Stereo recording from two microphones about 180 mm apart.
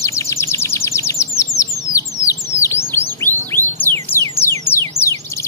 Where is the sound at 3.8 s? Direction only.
10° left (ahead or behind).